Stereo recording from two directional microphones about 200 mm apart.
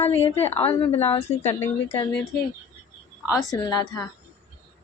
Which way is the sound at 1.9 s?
20° left (ahead or behind).